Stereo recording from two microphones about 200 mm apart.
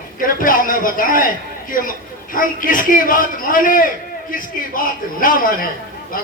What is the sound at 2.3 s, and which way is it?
A man's voice, 45° left (ahead or behind).